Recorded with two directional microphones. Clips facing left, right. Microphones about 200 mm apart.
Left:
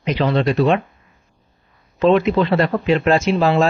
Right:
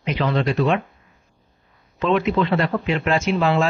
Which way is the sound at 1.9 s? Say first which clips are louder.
Left 5 dB; 35° left (ahead or behind).